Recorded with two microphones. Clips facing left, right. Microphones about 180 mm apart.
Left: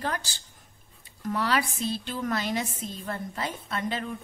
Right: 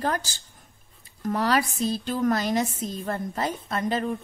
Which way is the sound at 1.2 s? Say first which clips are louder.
Right 3 dB; 45° right (ahead or behind).